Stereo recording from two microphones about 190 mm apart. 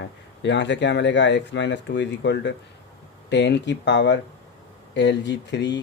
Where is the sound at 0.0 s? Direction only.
70° left (ahead or behind).